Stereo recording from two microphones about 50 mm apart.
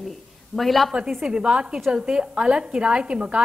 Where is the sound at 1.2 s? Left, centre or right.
Centre.